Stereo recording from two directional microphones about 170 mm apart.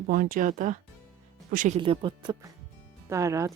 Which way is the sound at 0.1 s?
55° right (ahead or behind).